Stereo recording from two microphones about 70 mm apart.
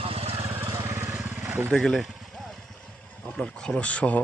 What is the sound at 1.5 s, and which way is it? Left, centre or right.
Vehicle, right.